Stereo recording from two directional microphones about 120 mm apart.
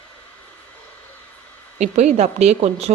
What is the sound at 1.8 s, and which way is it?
Speech, 65° right (ahead or behind).